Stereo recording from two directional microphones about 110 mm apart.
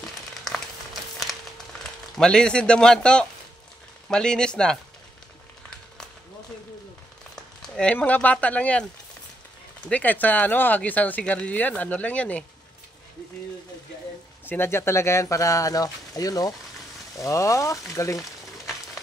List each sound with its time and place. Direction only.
1.1 s a sound: centre (ahead or behind)
4.1 s speech: 5° left (ahead or behind)
7.3 s speech: 5° left (ahead or behind)
9.8 s speech: 15° left (ahead or behind)
14.4 s speech: 20° left (ahead or behind)